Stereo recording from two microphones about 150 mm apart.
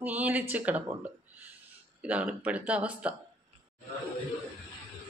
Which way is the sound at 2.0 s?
10° right (ahead or behind).